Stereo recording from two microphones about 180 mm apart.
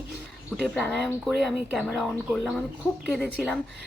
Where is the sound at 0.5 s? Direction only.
Centre (ahead or behind).